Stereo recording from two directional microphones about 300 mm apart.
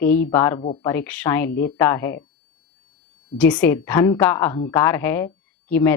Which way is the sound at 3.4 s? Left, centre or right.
Centre.